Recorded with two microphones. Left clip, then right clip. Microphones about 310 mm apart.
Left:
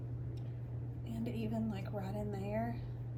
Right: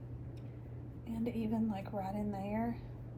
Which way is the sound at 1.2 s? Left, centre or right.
Centre.